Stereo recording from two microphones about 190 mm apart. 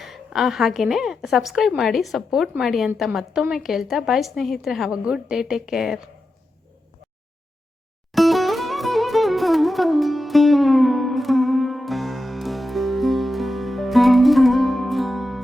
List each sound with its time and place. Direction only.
0.0 s a woman's voice: centre (ahead or behind)
8.1 s music: centre (ahead or behind)